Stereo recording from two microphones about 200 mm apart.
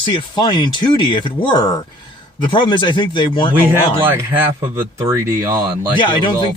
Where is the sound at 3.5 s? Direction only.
10° right (ahead or behind).